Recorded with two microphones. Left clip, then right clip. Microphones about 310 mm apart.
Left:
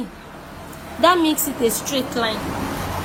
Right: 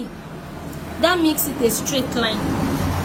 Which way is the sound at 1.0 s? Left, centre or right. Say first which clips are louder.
Left 2 dB; left.